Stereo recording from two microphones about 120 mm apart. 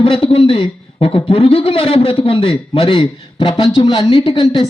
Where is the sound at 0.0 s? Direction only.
45° left (ahead or behind).